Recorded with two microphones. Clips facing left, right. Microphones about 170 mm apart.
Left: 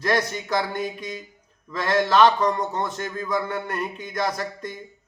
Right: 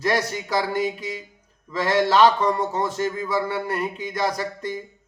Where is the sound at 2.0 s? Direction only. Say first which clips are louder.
Even; 10° right (ahead or behind).